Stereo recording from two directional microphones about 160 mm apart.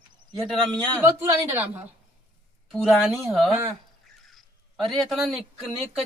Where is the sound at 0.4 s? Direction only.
5° left (ahead or behind).